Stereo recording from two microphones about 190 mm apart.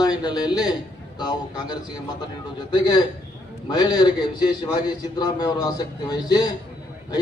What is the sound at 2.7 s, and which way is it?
A man's voice, 25° left (ahead or behind).